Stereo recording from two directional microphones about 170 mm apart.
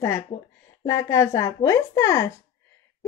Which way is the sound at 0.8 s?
15° left (ahead or behind).